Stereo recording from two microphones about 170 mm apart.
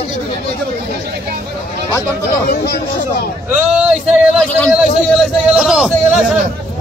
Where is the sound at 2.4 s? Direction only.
70° left (ahead or behind).